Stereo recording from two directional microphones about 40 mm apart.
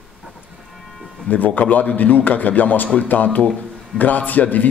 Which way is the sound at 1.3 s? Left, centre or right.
Left.